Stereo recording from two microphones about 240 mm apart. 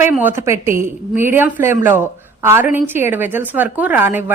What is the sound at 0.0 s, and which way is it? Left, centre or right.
Speech, centre.